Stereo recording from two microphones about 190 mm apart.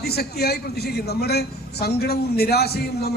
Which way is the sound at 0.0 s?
55° left (ahead or behind).